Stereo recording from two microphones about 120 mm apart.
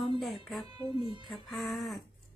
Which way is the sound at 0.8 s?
40° right (ahead or behind).